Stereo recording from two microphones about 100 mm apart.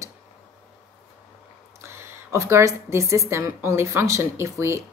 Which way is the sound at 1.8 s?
25° right (ahead or behind).